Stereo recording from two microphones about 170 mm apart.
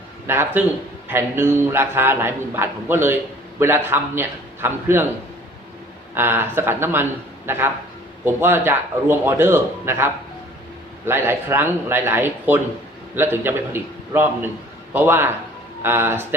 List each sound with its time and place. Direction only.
0.3 s a man's voice: 15° right (ahead or behind)
6.1 s a man's voice: 10° right (ahead or behind)